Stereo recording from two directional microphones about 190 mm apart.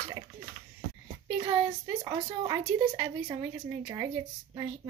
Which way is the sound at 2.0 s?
20° right (ahead or behind).